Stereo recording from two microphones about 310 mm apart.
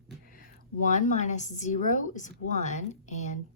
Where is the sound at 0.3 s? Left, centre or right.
Left.